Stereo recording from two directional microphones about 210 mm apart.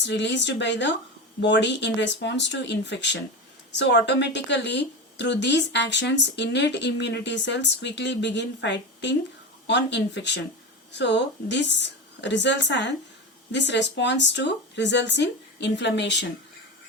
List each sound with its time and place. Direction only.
0.0 s a woman's voice: 55° left (ahead or behind)